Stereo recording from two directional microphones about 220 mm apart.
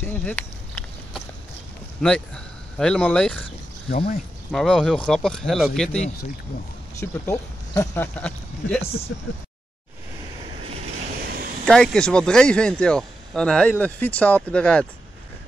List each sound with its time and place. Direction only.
0.0 s speech: 5° left (ahead or behind)
2.0 s speech: 5° left (ahead or behind)
4.5 s speech: centre (ahead or behind)
7.0 s speech: 15° left (ahead or behind)
8.8 s speech: 25° left (ahead or behind)
11.6 s speech: 5° left (ahead or behind)